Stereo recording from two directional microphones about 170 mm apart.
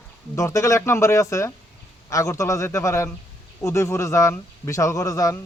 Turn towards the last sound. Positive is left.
turn(degrees=20)  # may be behind; listen again after turning